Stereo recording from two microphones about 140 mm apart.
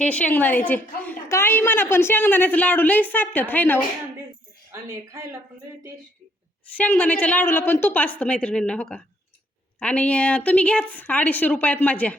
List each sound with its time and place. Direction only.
0.0 s a woman's voice: 10° left (ahead or behind)
4.7 s speech: 20° right (ahead or behind)
6.7 s a woman's voice: 10° left (ahead or behind)